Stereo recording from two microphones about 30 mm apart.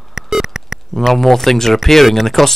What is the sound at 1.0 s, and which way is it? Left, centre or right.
Speech, centre.